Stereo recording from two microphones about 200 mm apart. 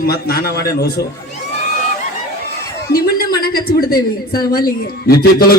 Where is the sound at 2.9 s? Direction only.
50° left (ahead or behind).